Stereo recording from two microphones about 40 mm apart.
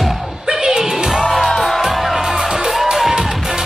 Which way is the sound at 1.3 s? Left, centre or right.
Centre.